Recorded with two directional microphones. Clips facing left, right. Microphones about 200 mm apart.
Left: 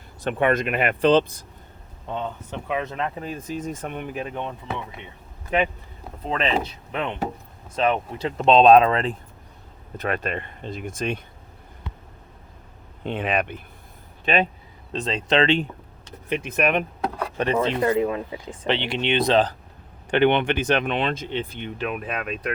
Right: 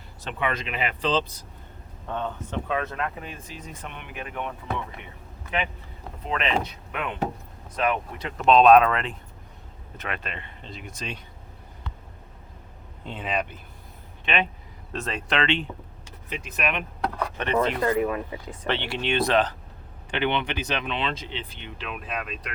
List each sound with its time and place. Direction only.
0.2 s speech: 50° left (ahead or behind)
2.0 s speech: 15° left (ahead or behind)
3.2 s speech: 40° left (ahead or behind)
5.5 s speech: 45° left (ahead or behind)
6.2 s speech: 30° left (ahead or behind)
10.0 s speech: 45° left (ahead or behind)
13.1 s speech: 65° left (ahead or behind)
14.3 s speech: 40° left (ahead or behind)
14.9 s speech: 20° left (ahead or behind)
16.3 s speech: 55° left (ahead or behind)
17.3 s speech: 35° left (ahead or behind)
20.1 s speech: 50° left (ahead or behind)